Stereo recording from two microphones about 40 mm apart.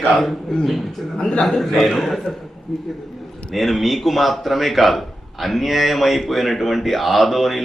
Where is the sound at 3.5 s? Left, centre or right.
Centre.